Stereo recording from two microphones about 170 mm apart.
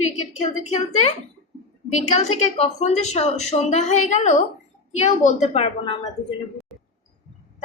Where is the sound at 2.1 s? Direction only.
40° left (ahead or behind).